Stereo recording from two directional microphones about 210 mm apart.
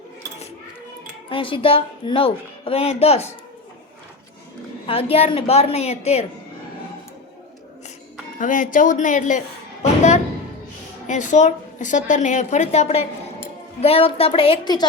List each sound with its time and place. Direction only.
1.3 s a woman's voice: 25° left (ahead or behind)
4.9 s a woman's voice: 25° left (ahead or behind)
8.4 s a woman's voice: 40° left (ahead or behind)
9.8 s music: 35° left (ahead or behind)
11.0 s a woman's voice: 35° left (ahead or behind); by 14.8 s 20° left (ahead or behind)